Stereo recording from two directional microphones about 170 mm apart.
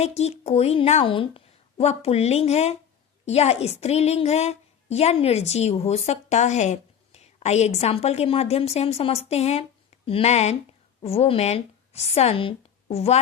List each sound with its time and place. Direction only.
0.0 s a woman's voice: 40° left (ahead or behind)